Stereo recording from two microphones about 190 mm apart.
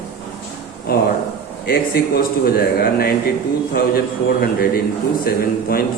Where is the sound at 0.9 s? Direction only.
50° left (ahead or behind).